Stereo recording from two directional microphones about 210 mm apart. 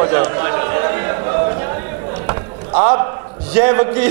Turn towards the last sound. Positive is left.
turn(degrees=-15)  # may be behind; listen again after turning